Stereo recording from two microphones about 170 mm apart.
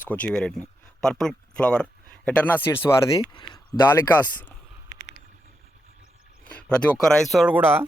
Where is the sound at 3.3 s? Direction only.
25° left (ahead or behind).